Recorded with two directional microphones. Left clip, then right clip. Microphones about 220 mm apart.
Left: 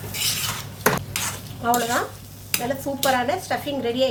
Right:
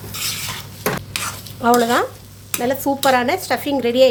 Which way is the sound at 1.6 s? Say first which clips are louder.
Right 7 dB; 50° right (ahead or behind).